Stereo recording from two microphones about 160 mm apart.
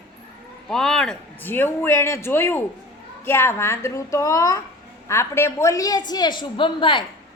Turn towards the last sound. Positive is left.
turn(degrees=30)  # may be behind; listen again after turning